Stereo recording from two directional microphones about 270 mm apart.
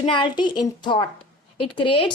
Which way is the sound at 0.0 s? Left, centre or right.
Centre.